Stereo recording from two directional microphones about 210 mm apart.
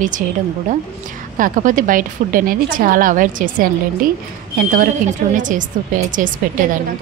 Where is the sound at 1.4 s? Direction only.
40° right (ahead or behind).